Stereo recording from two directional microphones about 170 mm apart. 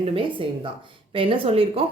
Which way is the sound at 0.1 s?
30° right (ahead or behind).